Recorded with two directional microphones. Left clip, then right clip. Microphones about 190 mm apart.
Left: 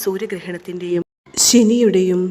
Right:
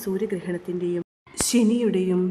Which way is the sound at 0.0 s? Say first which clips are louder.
Left 5 dB; 30° left (ahead or behind).